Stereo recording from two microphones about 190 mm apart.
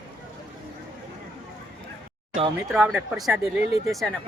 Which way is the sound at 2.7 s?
Centre (ahead or behind).